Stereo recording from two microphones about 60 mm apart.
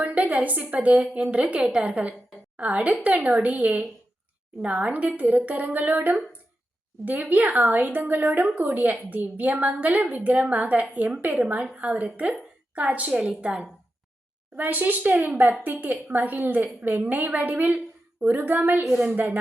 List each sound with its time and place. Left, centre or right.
0.0 s a woman's voice: right
14.5 s a woman's voice: right